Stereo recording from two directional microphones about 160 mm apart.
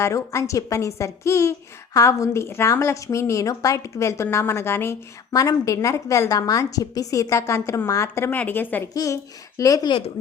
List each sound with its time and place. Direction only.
0.0 s a woman's voice: 20° left (ahead or behind)
8.9 s a woman's voice: 20° left (ahead or behind)